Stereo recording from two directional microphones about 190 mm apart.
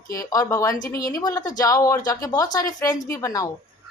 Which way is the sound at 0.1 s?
20° left (ahead or behind).